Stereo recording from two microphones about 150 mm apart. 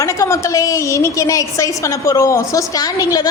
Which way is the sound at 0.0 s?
20° left (ahead or behind).